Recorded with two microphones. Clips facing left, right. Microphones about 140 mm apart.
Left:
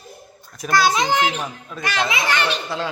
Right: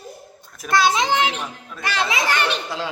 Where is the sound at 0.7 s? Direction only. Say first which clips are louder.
Even; 25° right (ahead or behind); by 2.5 s 50° right (ahead or behind).